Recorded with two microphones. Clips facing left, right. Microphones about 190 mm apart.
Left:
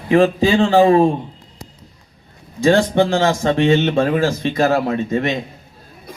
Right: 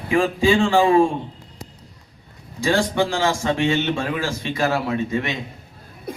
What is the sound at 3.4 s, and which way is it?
Speech, 45° left (ahead or behind).